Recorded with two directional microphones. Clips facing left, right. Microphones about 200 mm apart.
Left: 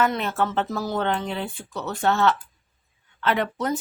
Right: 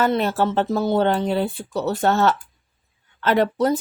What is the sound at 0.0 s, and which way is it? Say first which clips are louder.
Speech: right 4 dB; 35° right (ahead or behind).